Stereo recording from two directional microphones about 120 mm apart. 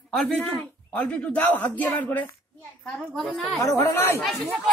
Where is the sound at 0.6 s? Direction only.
10° left (ahead or behind).